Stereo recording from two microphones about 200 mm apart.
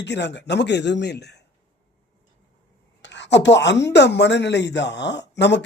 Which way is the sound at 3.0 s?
60° left (ahead or behind).